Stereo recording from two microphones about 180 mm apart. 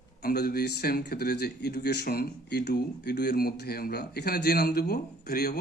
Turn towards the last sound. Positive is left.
turn(degrees=60)  # may be behind; listen again after turning